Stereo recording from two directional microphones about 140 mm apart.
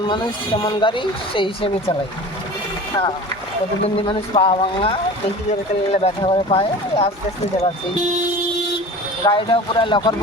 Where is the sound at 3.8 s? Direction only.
40° left (ahead or behind).